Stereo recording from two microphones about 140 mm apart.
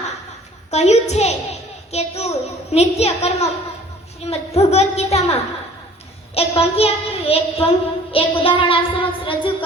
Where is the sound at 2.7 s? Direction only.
50° left (ahead or behind).